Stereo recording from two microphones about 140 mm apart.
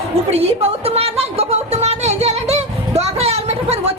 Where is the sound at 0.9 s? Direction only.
45° right (ahead or behind).